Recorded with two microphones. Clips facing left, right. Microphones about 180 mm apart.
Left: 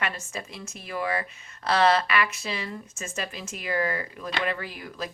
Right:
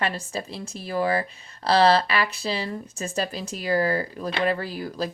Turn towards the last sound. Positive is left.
turn(degrees=-35)  # may be behind; listen again after turning